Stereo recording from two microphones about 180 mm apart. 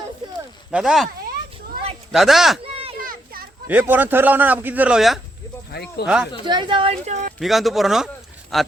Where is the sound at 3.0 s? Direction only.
50° right (ahead or behind).